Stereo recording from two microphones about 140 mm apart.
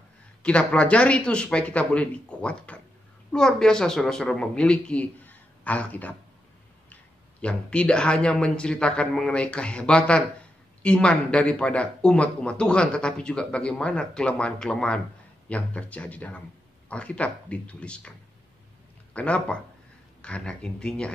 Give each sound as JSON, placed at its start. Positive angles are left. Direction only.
{"t": 0.4, "sound": "speech", "side_deg": 5}
{"t": 7.4, "sound": "speech", "side_deg": 10}
{"t": 19.1, "sound": "speech", "side_deg": 10}